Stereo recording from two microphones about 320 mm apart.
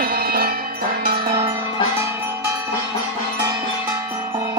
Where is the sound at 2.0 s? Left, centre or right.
Centre.